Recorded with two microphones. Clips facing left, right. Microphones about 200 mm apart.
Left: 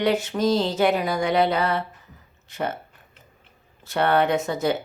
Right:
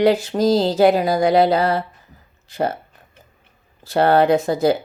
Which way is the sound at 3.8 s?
35° right (ahead or behind).